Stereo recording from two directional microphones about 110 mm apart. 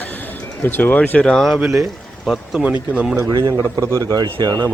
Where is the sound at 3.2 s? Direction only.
35° right (ahead or behind).